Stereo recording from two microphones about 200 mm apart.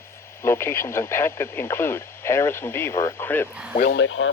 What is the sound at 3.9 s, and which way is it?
Speech, 75° left (ahead or behind).